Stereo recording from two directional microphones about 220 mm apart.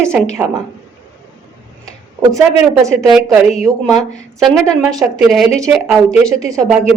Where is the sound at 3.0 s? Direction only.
Centre (ahead or behind).